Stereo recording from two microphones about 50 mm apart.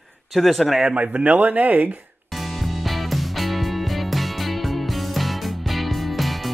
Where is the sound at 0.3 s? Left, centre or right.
Centre.